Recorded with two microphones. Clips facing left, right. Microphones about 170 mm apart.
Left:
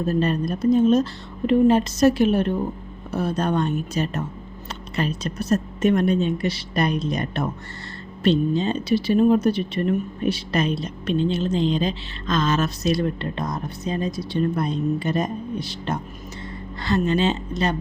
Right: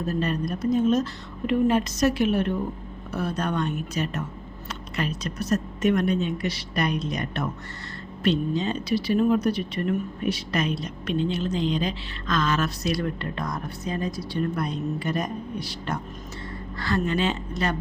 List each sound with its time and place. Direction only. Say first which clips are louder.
0.0 s speech: left 4 dB; 30° left (ahead or behind)